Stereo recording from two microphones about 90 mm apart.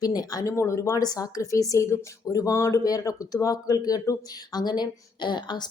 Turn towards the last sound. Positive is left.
turn(degrees=55)  # may be behind; listen again after turning